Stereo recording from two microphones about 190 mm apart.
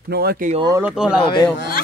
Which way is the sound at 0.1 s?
55° right (ahead or behind).